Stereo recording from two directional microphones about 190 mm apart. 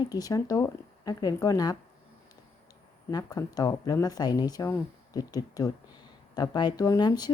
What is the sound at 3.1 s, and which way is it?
Speech, 20° left (ahead or behind).